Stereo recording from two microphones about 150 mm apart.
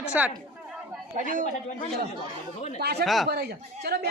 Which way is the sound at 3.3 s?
90° right.